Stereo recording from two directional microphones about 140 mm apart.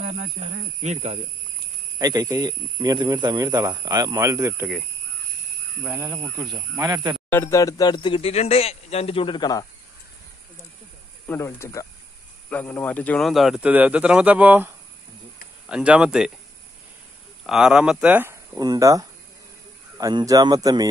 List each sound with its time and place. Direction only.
0.0 s speech: 50° right (ahead or behind)
2.0 s a man's voice: 25° right (ahead or behind)
5.9 s speech: 10° right (ahead or behind)
6.8 s a man's voice: 30° right (ahead or behind)
7.2 s speech: 20° left (ahead or behind)
11.2 s a man's voice: 15° left (ahead or behind)
13.3 s speech: centre (ahead or behind)
17.4 s speech: 5° right (ahead or behind)
18.6 s a man's voice: 25° right (ahead or behind)